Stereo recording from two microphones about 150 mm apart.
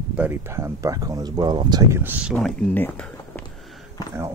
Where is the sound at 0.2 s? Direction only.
15° right (ahead or behind).